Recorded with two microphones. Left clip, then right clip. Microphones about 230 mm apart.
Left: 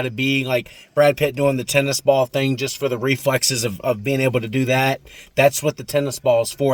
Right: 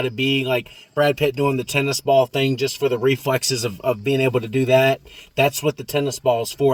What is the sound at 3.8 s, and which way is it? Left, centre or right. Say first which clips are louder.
Speech: even; left.